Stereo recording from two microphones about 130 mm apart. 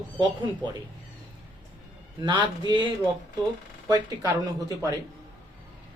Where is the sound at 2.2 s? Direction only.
40° right (ahead or behind).